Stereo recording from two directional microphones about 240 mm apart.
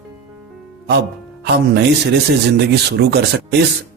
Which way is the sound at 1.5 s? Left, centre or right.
Right.